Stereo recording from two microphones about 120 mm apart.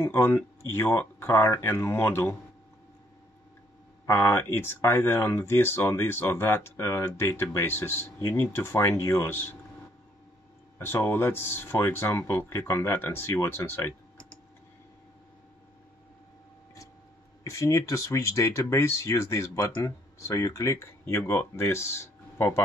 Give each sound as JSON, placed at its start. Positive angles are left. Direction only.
{"t": 0.0, "sound": "speech", "side_deg": 20}
{"t": 4.0, "sound": "speech", "side_deg": 20}
{"t": 10.8, "sound": "speech", "side_deg": 20}
{"t": 17.4, "sound": "speech", "side_deg": 25}